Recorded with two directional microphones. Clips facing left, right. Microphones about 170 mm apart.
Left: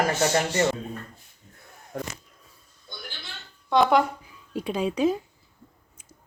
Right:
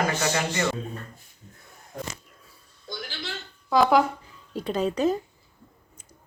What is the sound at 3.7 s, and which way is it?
Speech, centre (ahead or behind).